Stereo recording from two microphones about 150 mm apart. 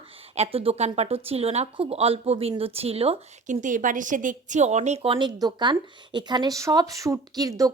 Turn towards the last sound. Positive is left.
turn(degrees=-25)  # may be behind; listen again after turning